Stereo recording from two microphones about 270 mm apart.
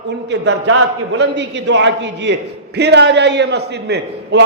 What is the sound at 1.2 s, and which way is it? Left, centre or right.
A man's voice, right.